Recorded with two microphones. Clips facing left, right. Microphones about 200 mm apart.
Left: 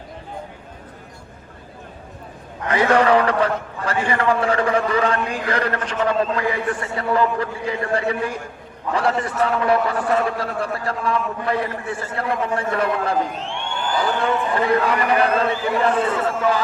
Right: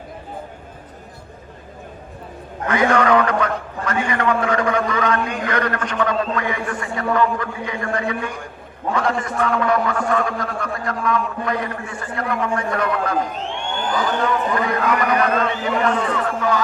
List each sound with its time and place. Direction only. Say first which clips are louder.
2.6 s a man's voice: left 1 dB; 30° left (ahead or behind)
14.5 s a man's voice: left 1 dB; 30° left (ahead or behind)